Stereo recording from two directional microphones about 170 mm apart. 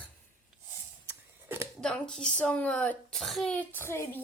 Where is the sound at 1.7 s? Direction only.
5° left (ahead or behind).